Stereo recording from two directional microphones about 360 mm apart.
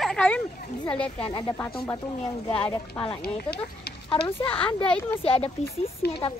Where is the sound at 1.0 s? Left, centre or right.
Centre.